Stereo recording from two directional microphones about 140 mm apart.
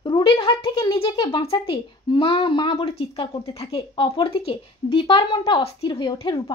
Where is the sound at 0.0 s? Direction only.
35° left (ahead or behind).